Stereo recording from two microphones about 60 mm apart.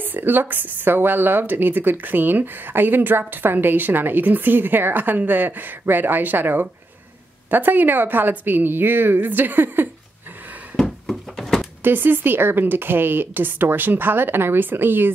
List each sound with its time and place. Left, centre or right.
0.0 s speech: right
11.1 s a sound: centre
11.8 s speech: right